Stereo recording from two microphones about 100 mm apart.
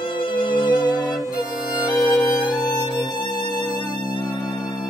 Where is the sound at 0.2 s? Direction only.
60° left (ahead or behind).